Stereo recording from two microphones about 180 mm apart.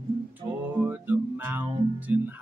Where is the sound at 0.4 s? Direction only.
10° right (ahead or behind).